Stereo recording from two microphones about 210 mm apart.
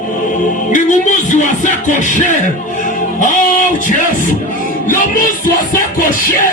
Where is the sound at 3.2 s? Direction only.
40° left (ahead or behind).